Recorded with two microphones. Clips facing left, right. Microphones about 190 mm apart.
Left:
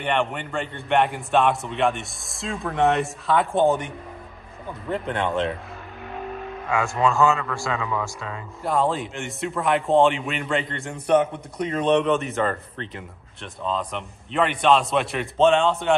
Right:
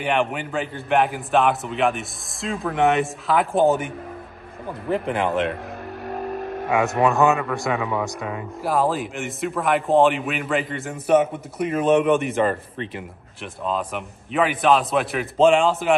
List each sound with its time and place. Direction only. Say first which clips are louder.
0.0 s a man's voice: right 2 dB; 5° right (ahead or behind)
6.0 s vehicle: right 4 dB; 45° right (ahead or behind)
6.7 s a man's voice: right 3 dB; 20° right (ahead or behind)
8.6 s a man's voice: right 1 dB; 5° right (ahead or behind)